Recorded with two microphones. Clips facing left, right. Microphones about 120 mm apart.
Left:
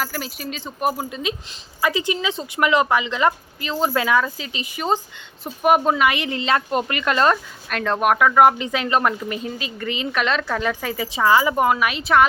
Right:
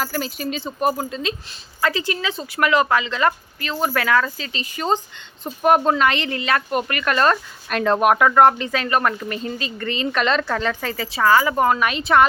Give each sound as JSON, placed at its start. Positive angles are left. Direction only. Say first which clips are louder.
{"t": 0.0, "sound": "speech", "louder": "right 3 dB", "side_deg": 5}
{"t": 6.4, "sound": "speech", "louder": "left 2 dB", "side_deg": 25}
{"t": 7.7, "sound": "speech", "louder": "right 3 dB", "side_deg": -5}
{"t": 8.4, "sound": "speech", "louder": "even", "side_deg": 15}